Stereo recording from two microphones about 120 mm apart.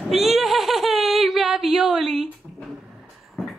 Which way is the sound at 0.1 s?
Centre (ahead or behind).